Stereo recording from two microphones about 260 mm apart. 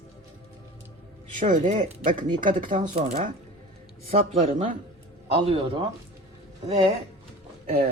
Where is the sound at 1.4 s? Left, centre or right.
Right.